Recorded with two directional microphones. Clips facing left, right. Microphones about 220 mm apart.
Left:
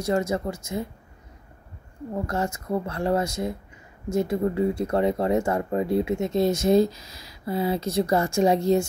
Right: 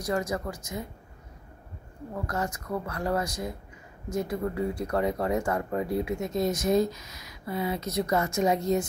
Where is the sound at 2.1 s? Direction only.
25° left (ahead or behind).